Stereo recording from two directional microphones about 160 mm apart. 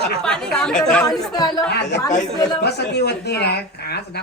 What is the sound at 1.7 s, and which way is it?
Speech, 90° left.